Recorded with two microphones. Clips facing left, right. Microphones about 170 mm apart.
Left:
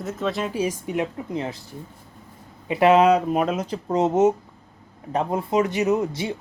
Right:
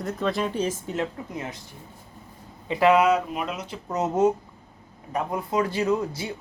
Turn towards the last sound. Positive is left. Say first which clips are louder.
# left 3 dB
turn(degrees=20)  # may be behind; listen again after turning